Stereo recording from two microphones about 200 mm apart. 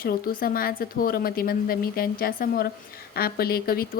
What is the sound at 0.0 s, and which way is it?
Speech, 45° left (ahead or behind).